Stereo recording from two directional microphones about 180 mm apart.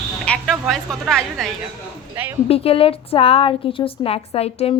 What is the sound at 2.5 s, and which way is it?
A woman's voice, 35° left (ahead or behind).